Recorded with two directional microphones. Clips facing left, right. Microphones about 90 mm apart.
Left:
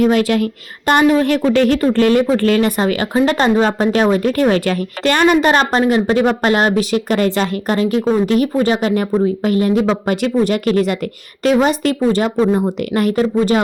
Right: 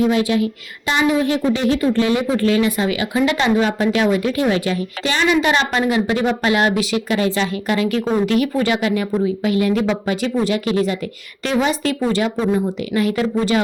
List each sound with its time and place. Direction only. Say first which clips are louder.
0.0 s a woman's voice: left 3 dB; 60° left (ahead or behind)
1.2 s speech: left 4 dB; 65° left (ahead or behind); by 10.0 s 35° left (ahead or behind)
10.1 s a woman's voice: left 4 dB; 55° left (ahead or behind)